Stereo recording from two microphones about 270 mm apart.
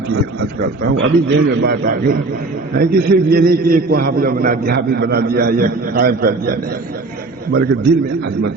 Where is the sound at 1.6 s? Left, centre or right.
Right.